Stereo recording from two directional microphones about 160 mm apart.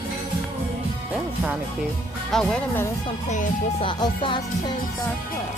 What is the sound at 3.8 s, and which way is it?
Music, 30° left (ahead or behind).